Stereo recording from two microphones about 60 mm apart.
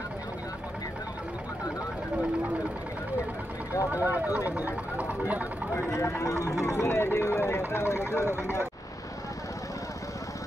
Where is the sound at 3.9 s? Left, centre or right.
Right.